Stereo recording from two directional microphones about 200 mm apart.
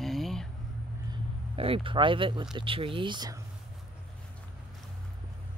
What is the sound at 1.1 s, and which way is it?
Speech, 25° right (ahead or behind).